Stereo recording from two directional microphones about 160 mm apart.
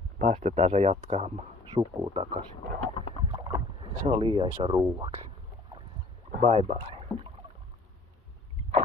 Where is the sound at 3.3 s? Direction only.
25° right (ahead or behind).